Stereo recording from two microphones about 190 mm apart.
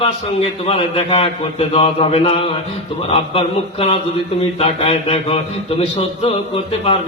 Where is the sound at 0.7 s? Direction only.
30° left (ahead or behind).